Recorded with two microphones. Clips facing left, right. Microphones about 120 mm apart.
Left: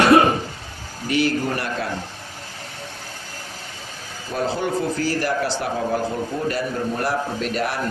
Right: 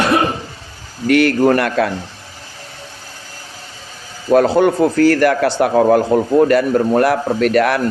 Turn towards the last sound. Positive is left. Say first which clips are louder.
# right 10 dB
turn(degrees=-65)  # may be behind; listen again after turning